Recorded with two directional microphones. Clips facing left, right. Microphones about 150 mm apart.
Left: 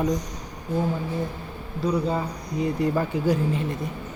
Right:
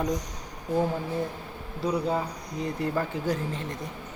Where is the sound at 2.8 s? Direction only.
10° left (ahead or behind).